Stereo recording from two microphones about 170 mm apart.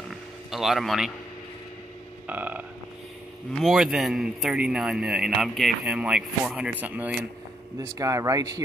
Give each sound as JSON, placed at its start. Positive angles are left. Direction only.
{"t": 0.1, "sound": "a sound", "side_deg": 0}
{"t": 2.2, "sound": "frog", "side_deg": -10}
{"t": 3.5, "sound": "a man's voice", "side_deg": 0}